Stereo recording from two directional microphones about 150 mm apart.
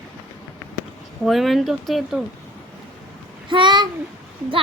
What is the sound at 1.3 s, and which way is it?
Speech, centre (ahead or behind).